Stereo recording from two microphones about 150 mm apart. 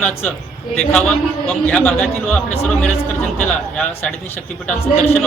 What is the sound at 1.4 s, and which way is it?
Speech, 10° left (ahead or behind).